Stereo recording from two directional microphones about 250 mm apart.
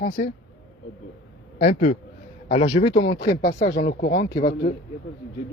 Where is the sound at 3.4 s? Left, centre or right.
Left.